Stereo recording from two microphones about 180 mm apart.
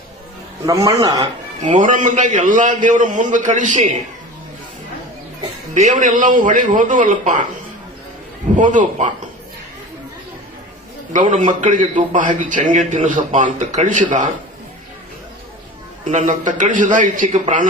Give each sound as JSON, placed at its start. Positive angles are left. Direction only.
{"t": 0.6, "sound": "a man's voice", "side_deg": -20}
{"t": 1.6, "sound": "a man's voice", "side_deg": -45}
{"t": 5.7, "sound": "a man's voice", "side_deg": -45}
{"t": 8.5, "sound": "a man's voice", "side_deg": -45}
{"t": 11.1, "sound": "a man's voice", "side_deg": -45}
{"t": 16.0, "sound": "a man's voice", "side_deg": -40}